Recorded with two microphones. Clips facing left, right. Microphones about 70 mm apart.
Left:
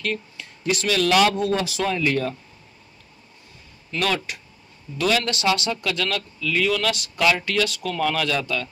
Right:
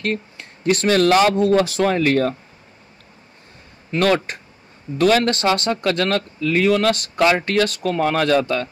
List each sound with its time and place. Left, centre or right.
0.0 s speech: right
4.0 s speech: right